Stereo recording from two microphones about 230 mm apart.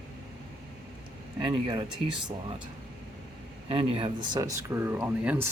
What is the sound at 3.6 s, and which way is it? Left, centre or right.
Speech, right.